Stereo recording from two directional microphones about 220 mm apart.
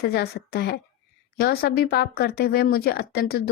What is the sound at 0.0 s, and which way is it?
Speech, 45° left (ahead or behind).